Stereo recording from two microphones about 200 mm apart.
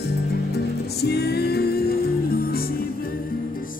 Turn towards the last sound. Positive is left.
turn(degrees=50)  # may be behind; listen again after turning